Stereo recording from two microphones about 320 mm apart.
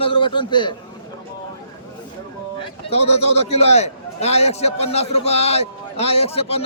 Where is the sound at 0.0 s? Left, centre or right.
Centre.